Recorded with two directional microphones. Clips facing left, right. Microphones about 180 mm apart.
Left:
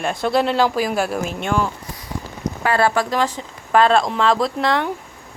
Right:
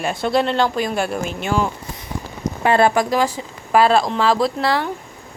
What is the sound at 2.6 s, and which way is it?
Speech, 20° right (ahead or behind).